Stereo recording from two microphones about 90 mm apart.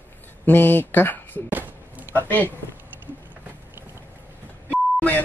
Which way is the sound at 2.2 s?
20° left (ahead or behind).